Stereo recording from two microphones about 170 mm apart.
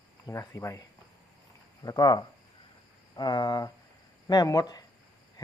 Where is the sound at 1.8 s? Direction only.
25° left (ahead or behind).